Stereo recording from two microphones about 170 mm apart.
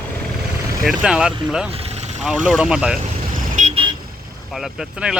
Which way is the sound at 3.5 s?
40° right (ahead or behind).